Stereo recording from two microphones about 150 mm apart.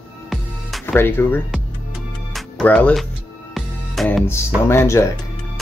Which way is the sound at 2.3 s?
10° left (ahead or behind).